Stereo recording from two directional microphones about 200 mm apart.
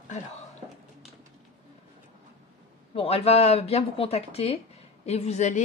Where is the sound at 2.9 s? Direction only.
30° left (ahead or behind).